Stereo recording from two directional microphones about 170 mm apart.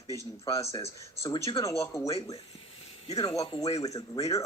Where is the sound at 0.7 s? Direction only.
35° left (ahead or behind).